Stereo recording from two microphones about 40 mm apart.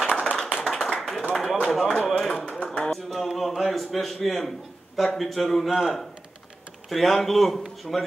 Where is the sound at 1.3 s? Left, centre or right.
Centre.